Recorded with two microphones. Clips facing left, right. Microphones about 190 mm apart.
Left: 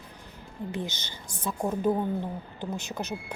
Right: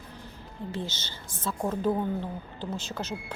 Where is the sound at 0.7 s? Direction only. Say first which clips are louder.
Even; 15° left (ahead or behind).